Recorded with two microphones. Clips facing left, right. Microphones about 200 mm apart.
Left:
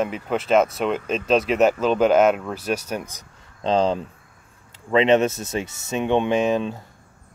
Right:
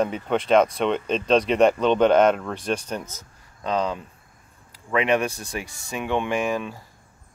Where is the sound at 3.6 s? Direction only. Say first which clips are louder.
Left 5 dB; 30° left (ahead or behind).